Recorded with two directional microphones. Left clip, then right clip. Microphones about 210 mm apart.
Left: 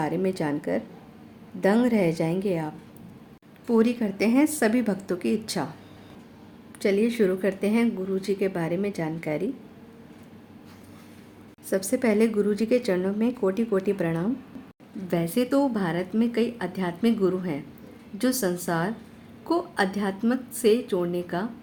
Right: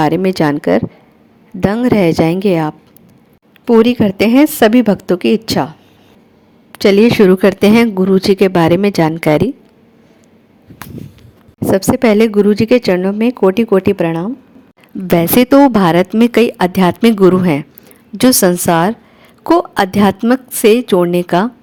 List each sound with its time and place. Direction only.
0.0 s a woman's voice: 45° right (ahead or behind)
6.7 s speech: 45° right (ahead or behind)
11.6 s a woman's voice: 40° right (ahead or behind)
15.0 s speech: 50° right (ahead or behind)